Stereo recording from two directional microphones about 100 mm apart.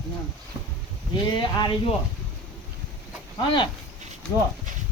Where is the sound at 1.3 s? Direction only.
50° left (ahead or behind).